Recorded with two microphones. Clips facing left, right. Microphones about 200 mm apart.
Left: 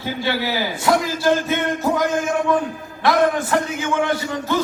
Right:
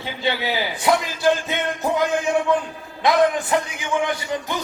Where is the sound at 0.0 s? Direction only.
20° right (ahead or behind).